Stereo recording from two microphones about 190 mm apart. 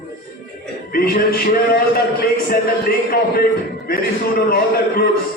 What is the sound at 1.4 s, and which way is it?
Speech, 50° left (ahead or behind).